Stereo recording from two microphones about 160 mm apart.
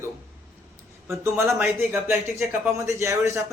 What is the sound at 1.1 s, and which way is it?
Speech, 15° right (ahead or behind).